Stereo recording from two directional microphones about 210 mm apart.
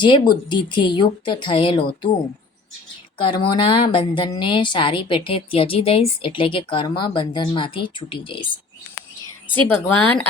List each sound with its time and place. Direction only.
0.0 s a woman's voice: 20° left (ahead or behind)
3.2 s a woman's voice: 20° left (ahead or behind)
9.5 s speech: 5° left (ahead or behind)